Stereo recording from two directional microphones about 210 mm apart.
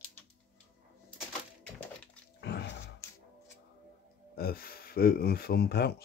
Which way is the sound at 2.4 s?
55° left (ahead or behind).